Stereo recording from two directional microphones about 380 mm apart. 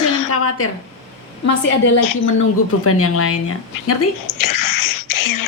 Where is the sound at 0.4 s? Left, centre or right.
Left.